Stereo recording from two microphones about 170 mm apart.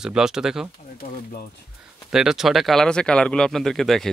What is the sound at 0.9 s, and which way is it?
Speech, 60° left (ahead or behind).